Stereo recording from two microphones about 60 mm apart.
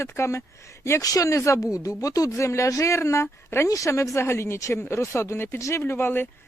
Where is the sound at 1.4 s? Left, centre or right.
Left.